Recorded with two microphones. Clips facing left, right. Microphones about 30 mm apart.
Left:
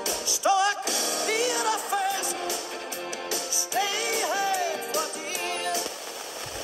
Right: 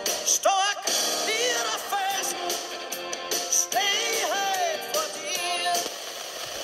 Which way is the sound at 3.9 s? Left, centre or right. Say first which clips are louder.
Right 2 dB; right.